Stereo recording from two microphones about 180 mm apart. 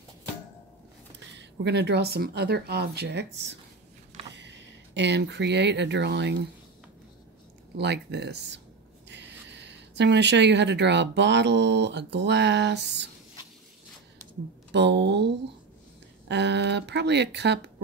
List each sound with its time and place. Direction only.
1.4 s speech: 70° right (ahead or behind)
4.3 s speech: 80° right
7.7 s speech: 70° right (ahead or behind)
14.7 s speech: 70° right (ahead or behind)